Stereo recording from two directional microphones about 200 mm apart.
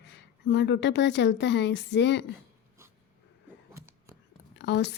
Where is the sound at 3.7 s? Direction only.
10° right (ahead or behind).